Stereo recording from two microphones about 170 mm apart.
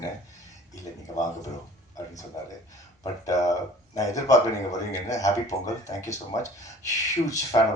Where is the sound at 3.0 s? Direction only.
20° left (ahead or behind).